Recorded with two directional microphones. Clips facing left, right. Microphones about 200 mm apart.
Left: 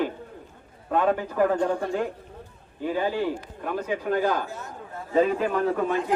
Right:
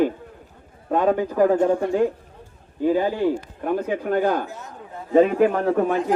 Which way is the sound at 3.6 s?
45° right (ahead or behind).